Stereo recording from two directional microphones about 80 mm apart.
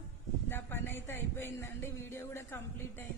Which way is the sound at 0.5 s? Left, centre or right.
Left.